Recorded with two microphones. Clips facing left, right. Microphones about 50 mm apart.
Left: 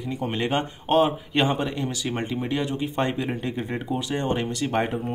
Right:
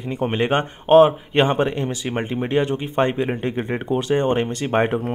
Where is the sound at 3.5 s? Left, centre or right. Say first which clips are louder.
Right 5 dB; right.